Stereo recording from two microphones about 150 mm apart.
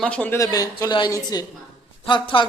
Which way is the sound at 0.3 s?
20° left (ahead or behind).